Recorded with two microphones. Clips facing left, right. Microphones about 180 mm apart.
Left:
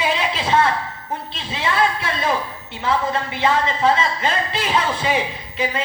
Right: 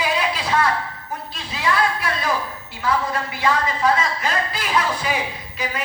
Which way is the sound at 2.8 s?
25° left (ahead or behind).